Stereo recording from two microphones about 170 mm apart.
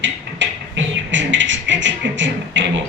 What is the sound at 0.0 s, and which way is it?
Beatboxing, 90° right.